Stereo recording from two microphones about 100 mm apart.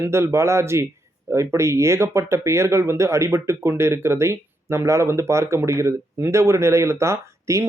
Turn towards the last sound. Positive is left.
turn(degrees=-30)  # may be behind; listen again after turning